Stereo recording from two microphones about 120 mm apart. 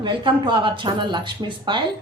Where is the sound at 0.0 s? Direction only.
45° right (ahead or behind).